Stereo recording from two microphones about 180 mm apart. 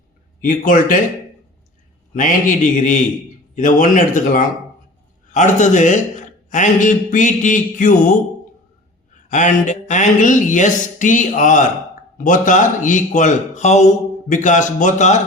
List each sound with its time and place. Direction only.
0.4 s speech: 50° left (ahead or behind)
2.1 s speech: 45° left (ahead or behind)
9.3 s speech: 45° left (ahead or behind)